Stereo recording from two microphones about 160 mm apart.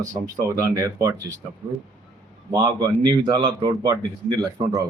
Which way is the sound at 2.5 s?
25° right (ahead or behind).